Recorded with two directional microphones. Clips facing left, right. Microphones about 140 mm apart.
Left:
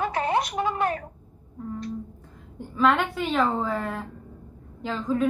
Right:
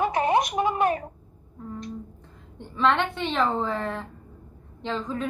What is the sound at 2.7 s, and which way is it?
A woman's voice, centre (ahead or behind).